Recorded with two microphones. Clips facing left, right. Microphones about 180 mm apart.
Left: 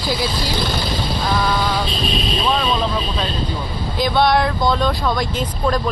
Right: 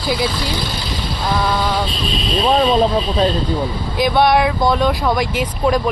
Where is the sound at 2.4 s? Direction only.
40° right (ahead or behind).